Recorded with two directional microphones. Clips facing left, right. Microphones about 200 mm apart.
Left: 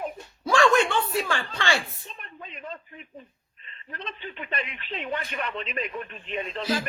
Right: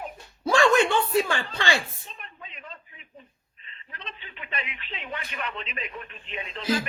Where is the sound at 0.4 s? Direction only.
20° right (ahead or behind).